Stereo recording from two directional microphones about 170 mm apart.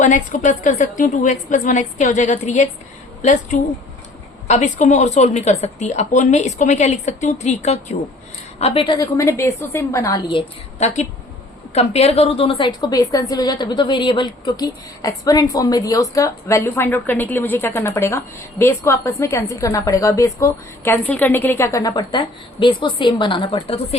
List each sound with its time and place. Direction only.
0.0 s a woman's voice: 45° left (ahead or behind)
9.0 s a woman's voice: 20° left (ahead or behind)
10.8 s a woman's voice: 40° left (ahead or behind)